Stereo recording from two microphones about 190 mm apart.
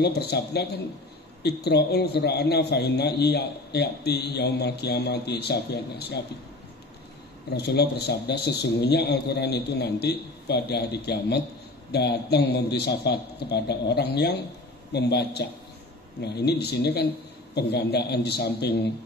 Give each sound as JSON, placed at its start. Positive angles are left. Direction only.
{"t": 0.0, "sound": "a man's voice", "side_deg": 60}
{"t": 7.5, "sound": "a man's voice", "side_deg": 60}